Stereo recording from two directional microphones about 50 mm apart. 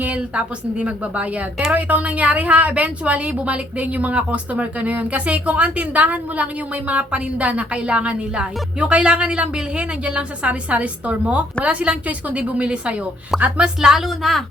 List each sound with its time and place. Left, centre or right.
0.0 s a woman's voice: right
13.3 s a woman's voice: centre